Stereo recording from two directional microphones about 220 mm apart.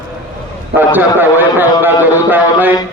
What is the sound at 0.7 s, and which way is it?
A man's voice, 10° right (ahead or behind).